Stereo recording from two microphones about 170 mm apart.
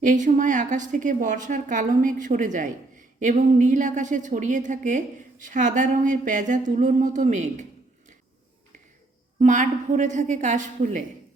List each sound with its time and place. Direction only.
0.0 s a woman's voice: 50° right (ahead or behind)
9.4 s a woman's voice: 45° right (ahead or behind)